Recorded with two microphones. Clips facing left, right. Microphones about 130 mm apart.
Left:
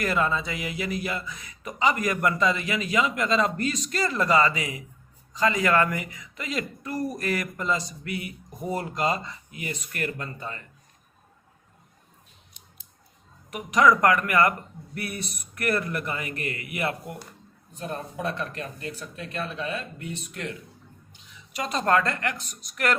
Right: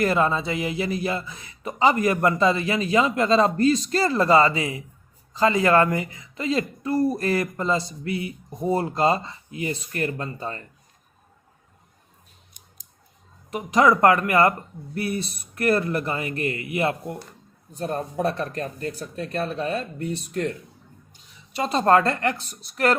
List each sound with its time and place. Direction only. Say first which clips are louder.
0.0 s speech: right 4 dB; 30° right (ahead or behind)
13.5 s speech: right 2 dB; 30° right (ahead or behind)
17.7 s a woman's voice: right 6 dB; 40° right (ahead or behind)